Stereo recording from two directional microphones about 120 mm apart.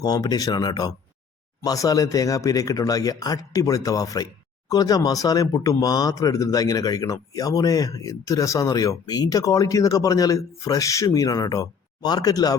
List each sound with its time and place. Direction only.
0.0 s speech: 35° left (ahead or behind)